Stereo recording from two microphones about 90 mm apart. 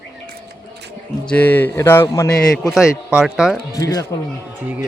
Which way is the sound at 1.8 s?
30° left (ahead or behind).